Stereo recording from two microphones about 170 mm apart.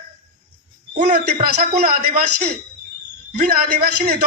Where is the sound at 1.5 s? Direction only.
70° right (ahead or behind).